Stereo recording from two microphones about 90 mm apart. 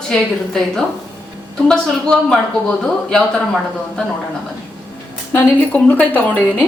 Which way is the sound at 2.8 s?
5° left (ahead or behind).